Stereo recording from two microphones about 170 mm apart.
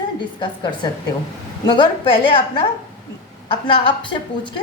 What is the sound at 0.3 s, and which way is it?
A woman's voice, 30° left (ahead or behind).